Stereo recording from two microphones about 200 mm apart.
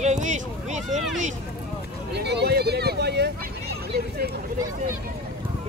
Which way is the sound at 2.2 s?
55° right (ahead or behind).